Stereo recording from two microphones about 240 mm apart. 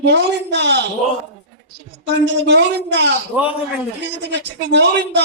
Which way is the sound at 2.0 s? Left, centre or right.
Right.